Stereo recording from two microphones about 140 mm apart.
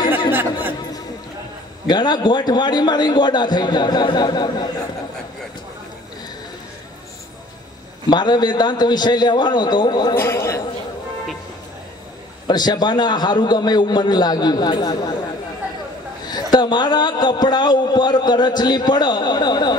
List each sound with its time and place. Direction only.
0.3 s chatter: 15° right (ahead or behind)
1.9 s a man's voice: 30° left (ahead or behind)
8.1 s a man's voice: 30° left (ahead or behind)
10.1 s a man's voice: 20° left (ahead or behind)
12.4 s a man's voice: 30° left (ahead or behind)
16.5 s a man's voice: 30° left (ahead or behind)